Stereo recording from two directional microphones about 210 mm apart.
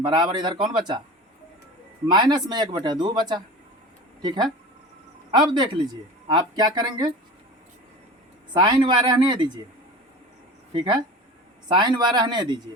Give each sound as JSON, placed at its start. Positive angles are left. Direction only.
{"t": 0.0, "sound": "speech", "side_deg": -20}
{"t": 2.0, "sound": "speech", "side_deg": -20}
{"t": 8.5, "sound": "speech", "side_deg": -20}
{"t": 10.7, "sound": "speech", "side_deg": -25}